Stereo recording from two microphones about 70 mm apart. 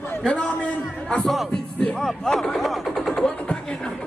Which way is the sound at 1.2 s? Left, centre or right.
Centre.